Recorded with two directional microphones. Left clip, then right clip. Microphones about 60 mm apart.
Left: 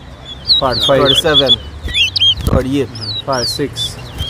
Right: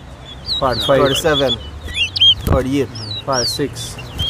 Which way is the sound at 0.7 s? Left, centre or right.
Left.